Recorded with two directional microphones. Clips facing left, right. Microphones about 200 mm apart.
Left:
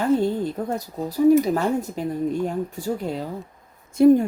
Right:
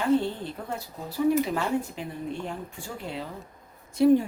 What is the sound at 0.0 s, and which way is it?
Speech, 40° left (ahead or behind).